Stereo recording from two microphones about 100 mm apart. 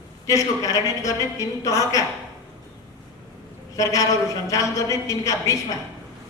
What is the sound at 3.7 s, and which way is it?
A woman's voice, 35° left (ahead or behind).